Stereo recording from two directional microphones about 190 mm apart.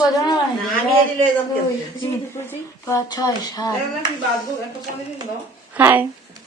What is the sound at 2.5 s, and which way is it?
Speech, 15° left (ahead or behind).